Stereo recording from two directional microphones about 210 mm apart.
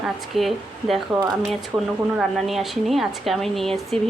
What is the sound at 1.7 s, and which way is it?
Speech, 15° right (ahead or behind).